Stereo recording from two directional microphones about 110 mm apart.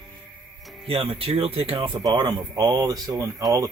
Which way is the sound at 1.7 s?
45° right (ahead or behind).